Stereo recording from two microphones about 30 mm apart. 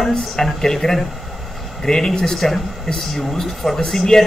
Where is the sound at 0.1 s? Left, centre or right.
Centre.